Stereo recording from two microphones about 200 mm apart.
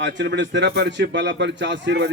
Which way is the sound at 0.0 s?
60° right (ahead or behind).